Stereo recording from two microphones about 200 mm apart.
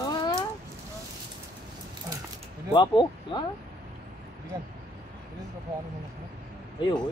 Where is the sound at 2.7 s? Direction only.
25° left (ahead or behind).